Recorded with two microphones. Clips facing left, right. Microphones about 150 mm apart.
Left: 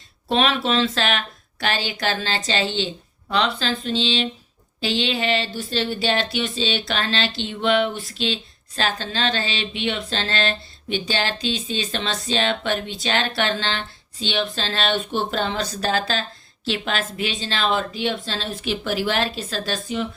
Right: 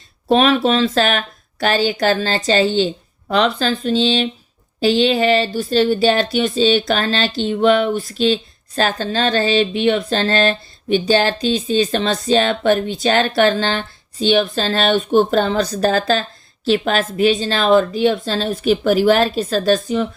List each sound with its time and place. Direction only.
0.3 s speech: 40° right (ahead or behind)